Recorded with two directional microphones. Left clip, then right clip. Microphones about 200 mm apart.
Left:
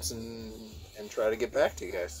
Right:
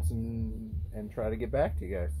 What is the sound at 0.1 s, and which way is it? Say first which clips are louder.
Speech: right 1 dB; 35° left (ahead or behind).